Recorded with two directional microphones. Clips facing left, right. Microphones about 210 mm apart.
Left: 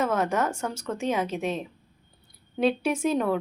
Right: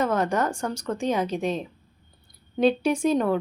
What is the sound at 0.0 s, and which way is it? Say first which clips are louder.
A woman's voice: right 1 dB; 5° left (ahead or behind).